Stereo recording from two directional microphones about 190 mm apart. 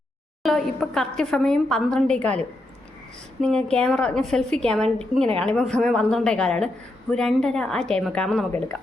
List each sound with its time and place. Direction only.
0.4 s a woman's voice: centre (ahead or behind)
3.4 s a woman's voice: 5° left (ahead or behind)